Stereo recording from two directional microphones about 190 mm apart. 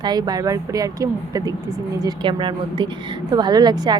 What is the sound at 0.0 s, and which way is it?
A woman's voice, 20° right (ahead or behind).